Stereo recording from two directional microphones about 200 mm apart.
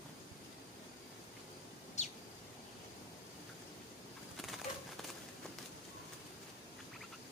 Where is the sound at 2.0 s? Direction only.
35° left (ahead or behind).